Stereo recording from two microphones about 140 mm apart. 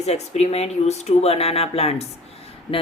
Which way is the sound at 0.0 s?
50° left (ahead or behind).